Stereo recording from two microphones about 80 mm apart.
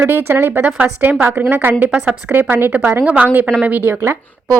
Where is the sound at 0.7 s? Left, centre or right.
Centre.